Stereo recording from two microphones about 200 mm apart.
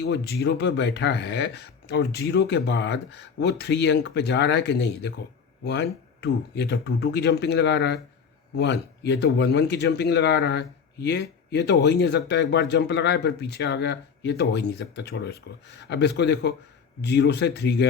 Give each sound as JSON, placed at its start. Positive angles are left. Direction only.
{"t": 0.0, "sound": "speech", "side_deg": 55}